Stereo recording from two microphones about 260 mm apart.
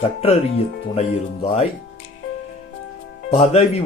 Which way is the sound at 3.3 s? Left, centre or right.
Left.